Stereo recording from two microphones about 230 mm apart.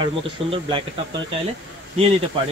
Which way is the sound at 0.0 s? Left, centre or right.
Right.